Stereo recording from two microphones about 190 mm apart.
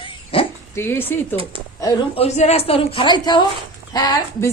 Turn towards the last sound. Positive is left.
turn(degrees=20)  # may be behind; listen again after turning